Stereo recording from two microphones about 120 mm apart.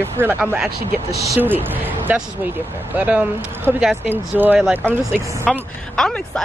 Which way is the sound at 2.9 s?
10° right (ahead or behind).